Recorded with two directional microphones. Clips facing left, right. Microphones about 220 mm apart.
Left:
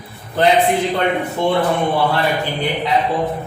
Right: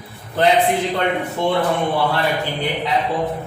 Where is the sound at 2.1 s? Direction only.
15° left (ahead or behind).